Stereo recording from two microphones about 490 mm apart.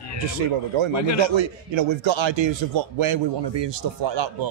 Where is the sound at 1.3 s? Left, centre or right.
Right.